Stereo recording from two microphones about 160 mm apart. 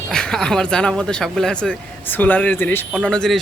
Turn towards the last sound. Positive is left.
turn(degrees=5)  # may be behind; listen again after turning